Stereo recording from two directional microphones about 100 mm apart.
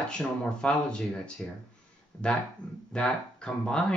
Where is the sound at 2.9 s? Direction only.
10° left (ahead or behind).